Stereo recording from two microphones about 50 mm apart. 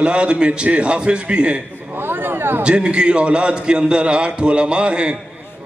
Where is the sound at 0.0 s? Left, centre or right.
Right.